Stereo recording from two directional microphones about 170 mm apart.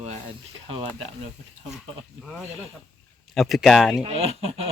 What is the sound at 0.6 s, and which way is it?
Speech, 35° right (ahead or behind).